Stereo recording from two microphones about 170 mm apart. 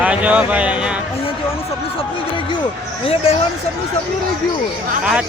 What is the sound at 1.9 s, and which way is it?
Speech, 30° left (ahead or behind).